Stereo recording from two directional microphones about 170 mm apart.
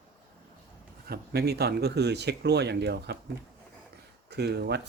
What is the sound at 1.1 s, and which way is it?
Speech, 70° right (ahead or behind).